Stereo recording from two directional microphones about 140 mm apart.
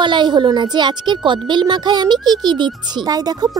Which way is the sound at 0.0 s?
35° right (ahead or behind).